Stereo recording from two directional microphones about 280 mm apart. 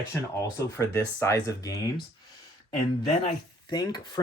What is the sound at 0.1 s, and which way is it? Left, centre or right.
Speech, centre.